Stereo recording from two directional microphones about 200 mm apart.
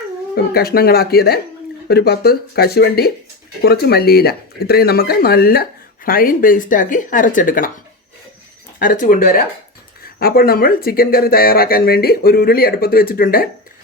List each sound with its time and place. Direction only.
0.3 s speech: 50° left (ahead or behind)
8.8 s speech: 40° left (ahead or behind)